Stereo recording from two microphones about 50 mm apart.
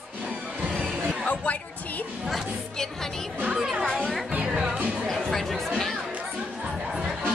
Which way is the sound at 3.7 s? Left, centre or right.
Centre.